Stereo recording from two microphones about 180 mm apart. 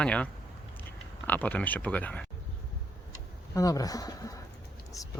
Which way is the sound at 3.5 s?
20° left (ahead or behind).